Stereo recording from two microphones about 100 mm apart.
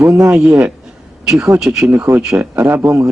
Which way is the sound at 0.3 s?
10° right (ahead or behind).